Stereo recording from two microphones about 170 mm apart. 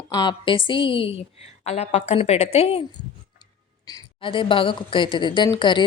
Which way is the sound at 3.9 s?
25° left (ahead or behind).